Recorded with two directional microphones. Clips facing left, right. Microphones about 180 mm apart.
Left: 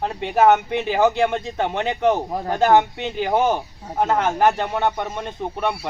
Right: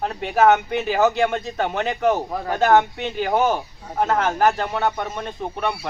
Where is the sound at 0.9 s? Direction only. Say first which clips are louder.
Left 1 dB; 10° left (ahead or behind).